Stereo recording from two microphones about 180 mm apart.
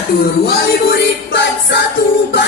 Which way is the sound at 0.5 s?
65° left (ahead or behind).